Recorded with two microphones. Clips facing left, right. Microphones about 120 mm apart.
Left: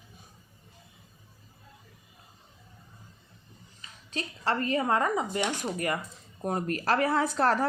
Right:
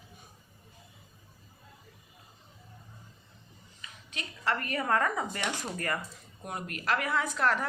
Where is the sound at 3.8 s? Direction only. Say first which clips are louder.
Left 6 dB; 30° left (ahead or behind).